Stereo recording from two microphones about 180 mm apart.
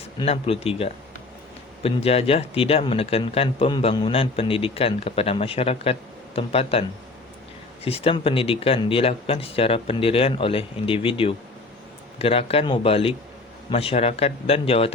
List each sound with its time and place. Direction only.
0.2 s speech: 30° left (ahead or behind)
7.9 s speech: 35° left (ahead or behind)